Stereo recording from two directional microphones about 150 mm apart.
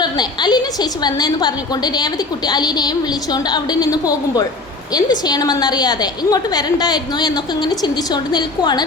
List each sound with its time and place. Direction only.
0.0 s a woman's voice: 30° left (ahead or behind)